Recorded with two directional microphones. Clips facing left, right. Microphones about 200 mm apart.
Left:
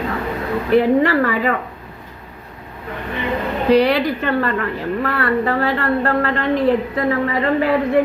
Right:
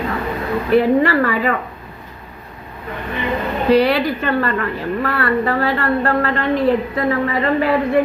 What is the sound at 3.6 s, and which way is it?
A woman's voice, 15° left (ahead or behind).